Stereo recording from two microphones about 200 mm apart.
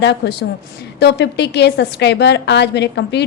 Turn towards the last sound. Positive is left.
turn(degrees=60)  # may be behind; listen again after turning